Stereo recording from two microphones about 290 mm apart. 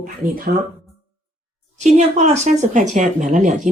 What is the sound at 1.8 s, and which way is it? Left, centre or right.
Speech, right.